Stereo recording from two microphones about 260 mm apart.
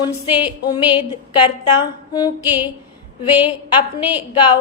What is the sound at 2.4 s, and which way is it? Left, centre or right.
A woman's voice, centre.